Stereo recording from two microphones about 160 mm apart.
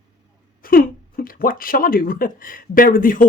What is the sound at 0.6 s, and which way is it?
Speech, 65° left (ahead or behind).